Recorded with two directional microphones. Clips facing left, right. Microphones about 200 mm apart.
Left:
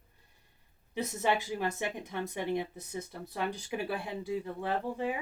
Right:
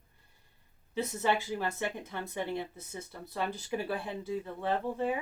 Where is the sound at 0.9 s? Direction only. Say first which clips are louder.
Even; 15° left (ahead or behind).